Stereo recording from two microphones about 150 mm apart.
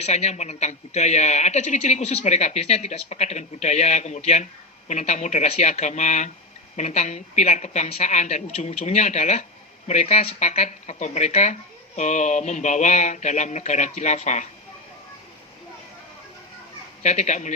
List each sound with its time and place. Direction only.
0.0 s a woman's voice: 45° left (ahead or behind)
17.0 s a woman's voice: 50° left (ahead or behind)